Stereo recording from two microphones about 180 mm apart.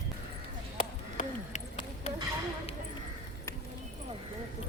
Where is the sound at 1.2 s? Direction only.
30° left (ahead or behind).